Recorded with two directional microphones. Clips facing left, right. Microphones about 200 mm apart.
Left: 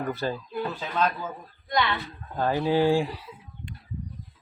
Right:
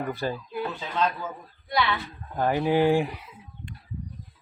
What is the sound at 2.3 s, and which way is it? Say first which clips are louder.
Speech: right 1 dB; 15° right (ahead or behind).